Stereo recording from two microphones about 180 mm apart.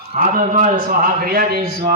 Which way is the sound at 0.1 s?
40° right (ahead or behind).